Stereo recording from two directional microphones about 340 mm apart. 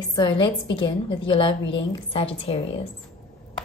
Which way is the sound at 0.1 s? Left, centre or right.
Centre.